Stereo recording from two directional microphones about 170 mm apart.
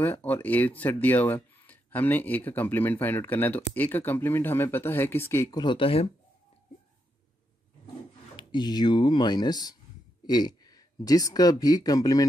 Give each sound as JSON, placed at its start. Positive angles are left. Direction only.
{"t": 0.0, "sound": "speech", "side_deg": 10}
{"t": 8.4, "sound": "speech", "side_deg": 25}